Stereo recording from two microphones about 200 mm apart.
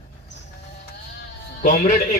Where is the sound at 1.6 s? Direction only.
45° left (ahead or behind).